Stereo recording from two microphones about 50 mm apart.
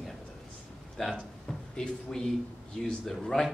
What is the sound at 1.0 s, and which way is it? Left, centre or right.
A man's voice, centre.